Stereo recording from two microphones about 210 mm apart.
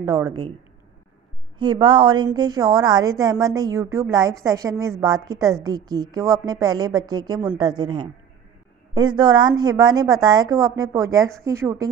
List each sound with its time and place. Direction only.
0.0 s a woman's voice: 15° right (ahead or behind)
1.6 s a woman's voice: 20° right (ahead or behind)